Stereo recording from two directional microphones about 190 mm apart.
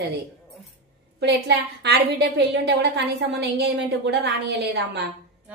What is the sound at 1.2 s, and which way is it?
A woman's voice, 65° right (ahead or behind).